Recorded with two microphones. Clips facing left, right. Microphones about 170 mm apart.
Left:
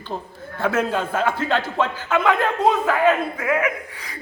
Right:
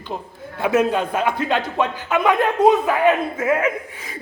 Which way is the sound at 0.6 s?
15° right (ahead or behind).